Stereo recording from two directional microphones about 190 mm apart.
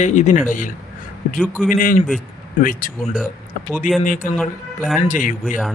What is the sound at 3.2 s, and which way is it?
Speech, 10° left (ahead or behind).